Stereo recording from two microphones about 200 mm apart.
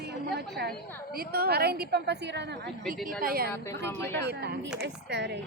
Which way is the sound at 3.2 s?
50° right (ahead or behind).